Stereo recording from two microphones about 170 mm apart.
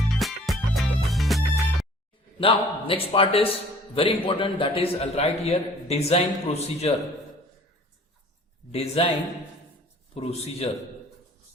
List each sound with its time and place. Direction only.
0.0 s music: centre (ahead or behind)
2.4 s a man's voice: 30° left (ahead or behind)
8.7 s a man's voice: 35° left (ahead or behind)
10.2 s a man's voice: 35° left (ahead or behind)